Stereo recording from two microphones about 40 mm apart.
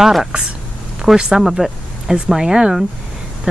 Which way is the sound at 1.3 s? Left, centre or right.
Centre.